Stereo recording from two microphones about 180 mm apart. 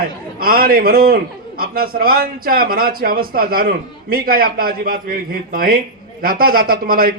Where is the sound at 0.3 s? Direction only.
55° right (ahead or behind).